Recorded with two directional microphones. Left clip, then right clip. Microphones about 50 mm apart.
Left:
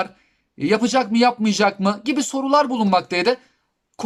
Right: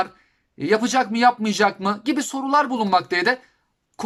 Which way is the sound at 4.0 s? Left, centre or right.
Left.